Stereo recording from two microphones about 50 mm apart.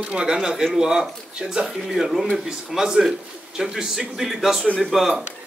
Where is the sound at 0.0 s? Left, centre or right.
Centre.